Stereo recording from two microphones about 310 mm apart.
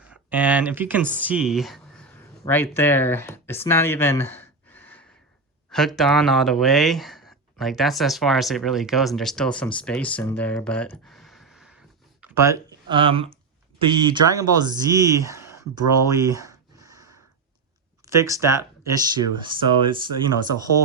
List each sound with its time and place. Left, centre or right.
0.1 s speech: centre
16.0 s a sound: centre
18.1 s speech: centre